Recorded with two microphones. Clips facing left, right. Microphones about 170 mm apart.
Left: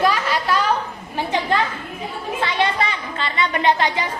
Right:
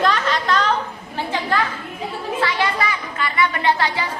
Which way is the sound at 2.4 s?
25° left (ahead or behind).